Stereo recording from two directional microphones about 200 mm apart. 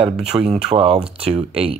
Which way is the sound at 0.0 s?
30° right (ahead or behind).